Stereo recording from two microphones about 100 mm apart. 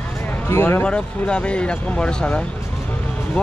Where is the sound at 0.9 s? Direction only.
10° left (ahead or behind).